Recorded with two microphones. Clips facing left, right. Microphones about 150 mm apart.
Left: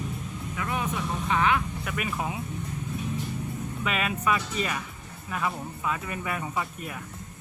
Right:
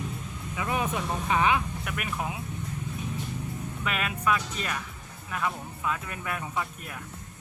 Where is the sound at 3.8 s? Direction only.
Centre (ahead or behind).